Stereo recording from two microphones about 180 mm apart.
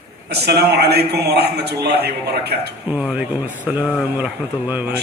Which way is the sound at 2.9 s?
10° right (ahead or behind).